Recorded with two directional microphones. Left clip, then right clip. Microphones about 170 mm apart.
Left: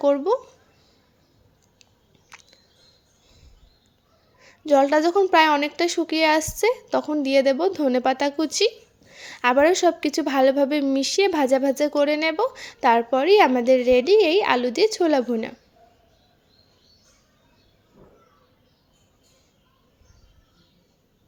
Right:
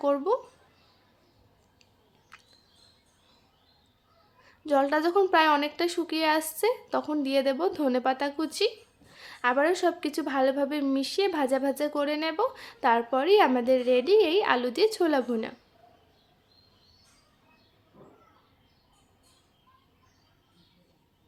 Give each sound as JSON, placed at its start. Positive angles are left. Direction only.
{"t": 0.0, "sound": "speech", "side_deg": 25}
{"t": 2.3, "sound": "a sound", "side_deg": 30}
{"t": 4.4, "sound": "a woman's voice", "side_deg": 25}